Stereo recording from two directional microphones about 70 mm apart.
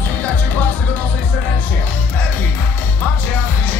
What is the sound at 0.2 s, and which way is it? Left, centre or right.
Music, left.